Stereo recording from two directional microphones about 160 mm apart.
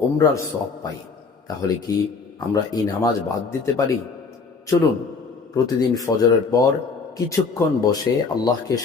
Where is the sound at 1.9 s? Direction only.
20° left (ahead or behind).